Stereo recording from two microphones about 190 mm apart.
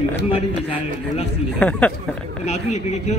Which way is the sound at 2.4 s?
35° left (ahead or behind).